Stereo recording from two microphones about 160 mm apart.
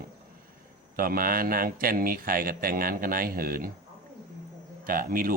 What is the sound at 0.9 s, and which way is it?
Speech, 65° right (ahead or behind).